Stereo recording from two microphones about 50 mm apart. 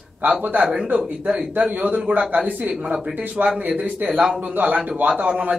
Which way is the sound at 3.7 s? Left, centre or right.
Right.